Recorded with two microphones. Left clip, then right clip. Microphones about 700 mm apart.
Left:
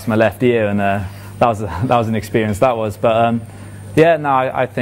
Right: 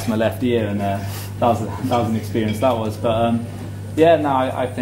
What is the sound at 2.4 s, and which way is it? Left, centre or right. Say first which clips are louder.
Speech: left 4 dB; left.